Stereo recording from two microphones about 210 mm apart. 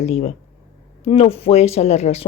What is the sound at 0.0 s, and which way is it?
Speech, 30° left (ahead or behind).